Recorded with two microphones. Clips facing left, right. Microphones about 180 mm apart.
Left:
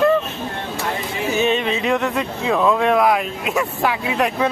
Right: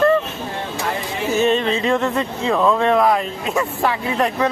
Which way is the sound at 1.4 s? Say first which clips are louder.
Right 2 dB; centre (ahead or behind).